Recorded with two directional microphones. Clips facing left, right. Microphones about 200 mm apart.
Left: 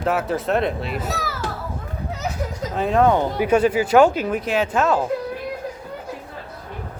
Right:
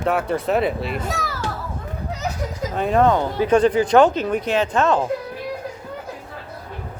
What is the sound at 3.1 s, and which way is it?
Speech, 15° left (ahead or behind).